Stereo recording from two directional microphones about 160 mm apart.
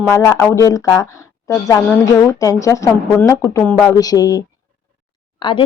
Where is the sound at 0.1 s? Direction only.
20° left (ahead or behind).